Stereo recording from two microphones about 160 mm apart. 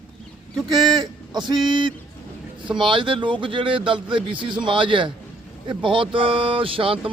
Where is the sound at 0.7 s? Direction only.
25° right (ahead or behind).